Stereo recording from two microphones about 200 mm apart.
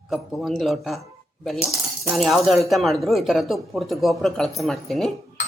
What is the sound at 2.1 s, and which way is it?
Speech, centre (ahead or behind).